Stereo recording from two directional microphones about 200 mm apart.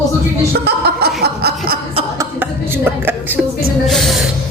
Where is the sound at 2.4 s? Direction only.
10° right (ahead or behind).